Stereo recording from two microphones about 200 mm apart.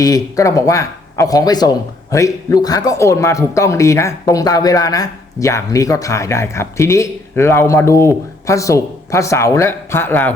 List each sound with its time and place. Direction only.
0.0 s speech: 15° left (ahead or behind)